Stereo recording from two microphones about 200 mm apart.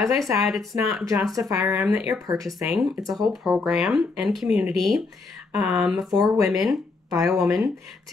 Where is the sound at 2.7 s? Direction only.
Centre (ahead or behind).